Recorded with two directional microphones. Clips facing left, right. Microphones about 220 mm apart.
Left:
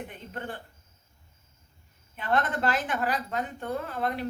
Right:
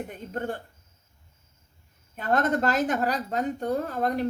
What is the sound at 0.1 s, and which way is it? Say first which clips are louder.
Speech: right 6 dB; 45° right (ahead or behind).